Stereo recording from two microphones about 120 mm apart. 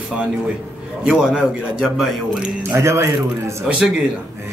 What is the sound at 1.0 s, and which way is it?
Speech, 5° right (ahead or behind).